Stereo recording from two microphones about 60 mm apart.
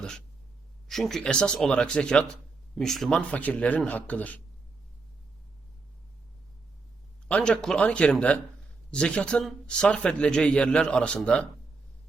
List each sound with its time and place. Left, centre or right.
0.9 s a man's voice: centre
3.2 s speech: left
7.8 s a man's voice: centre